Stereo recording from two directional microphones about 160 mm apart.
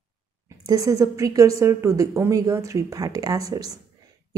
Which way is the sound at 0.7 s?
20° right (ahead or behind).